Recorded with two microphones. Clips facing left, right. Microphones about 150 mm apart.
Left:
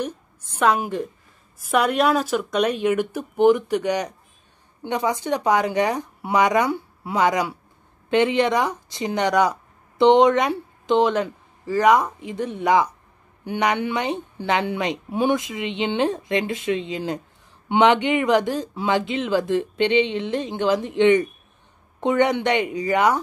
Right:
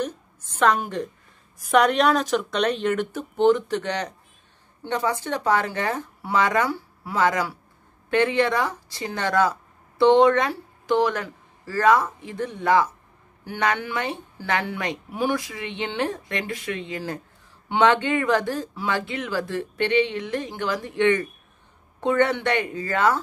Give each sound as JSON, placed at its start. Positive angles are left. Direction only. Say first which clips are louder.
{"t": 0.6, "sound": "a woman's voice", "louder": "left 1 dB", "side_deg": 10}